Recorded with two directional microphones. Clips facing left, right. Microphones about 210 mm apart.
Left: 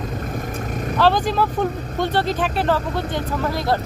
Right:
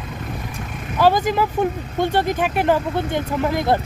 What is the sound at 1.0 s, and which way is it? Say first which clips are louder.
Speech: right 2 dB; 15° right (ahead or behind).